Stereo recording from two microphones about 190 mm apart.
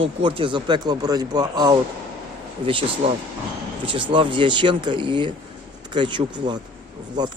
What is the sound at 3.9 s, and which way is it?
Speech, 25° right (ahead or behind).